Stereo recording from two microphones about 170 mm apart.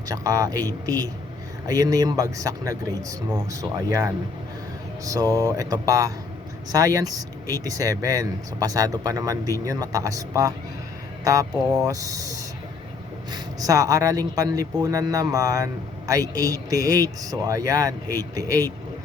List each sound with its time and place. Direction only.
0.1 s speech: 20° right (ahead or behind)
5.0 s speech: 20° right (ahead or behind)